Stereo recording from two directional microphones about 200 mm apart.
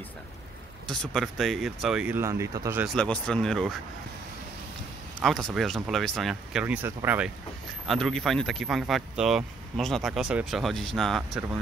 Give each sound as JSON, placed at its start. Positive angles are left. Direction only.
{"t": 0.8, "sound": "speech", "side_deg": 0}
{"t": 2.9, "sound": "speech", "side_deg": 5}
{"t": 5.2, "sound": "speech", "side_deg": 0}
{"t": 6.6, "sound": "speech", "side_deg": -10}